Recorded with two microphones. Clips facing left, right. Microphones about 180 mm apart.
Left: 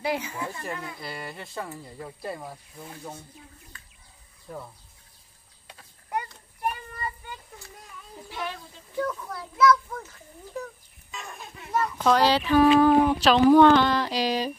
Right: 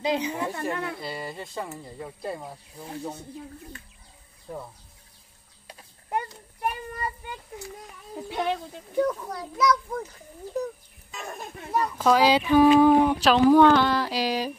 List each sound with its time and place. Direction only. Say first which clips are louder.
0.0 s speech: right 3 dB; 20° right (ahead or behind)
0.6 s speech: right 6 dB; 65° right (ahead or behind)
1.0 s speech: right 3 dB; 25° right (ahead or behind)
4.5 s speech: right 2 dB; 25° right (ahead or behind)
7.5 s children playing: right 6 dB; 65° right (ahead or behind)
8.9 s speech: right 5 dB; 20° right (ahead or behind)
11.2 s speech: right 5 dB; 40° right (ahead or behind)
11.7 s speech: right 1 dB; 10° right (ahead or behind)